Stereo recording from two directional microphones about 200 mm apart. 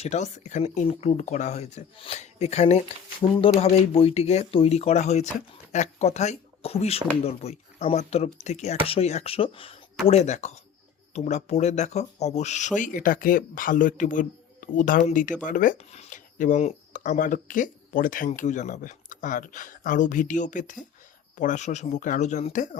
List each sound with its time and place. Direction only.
0.0 s speech: 35° left (ahead or behind)